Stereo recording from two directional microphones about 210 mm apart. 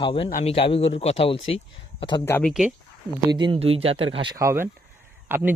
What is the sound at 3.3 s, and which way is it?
Speech, 25° right (ahead or behind).